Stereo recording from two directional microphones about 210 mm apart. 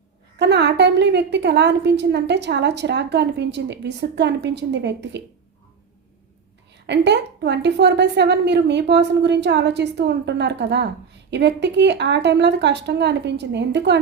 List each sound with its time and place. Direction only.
0.3 s a woman's voice: 55° right (ahead or behind)
6.8 s a woman's voice: 55° right (ahead or behind)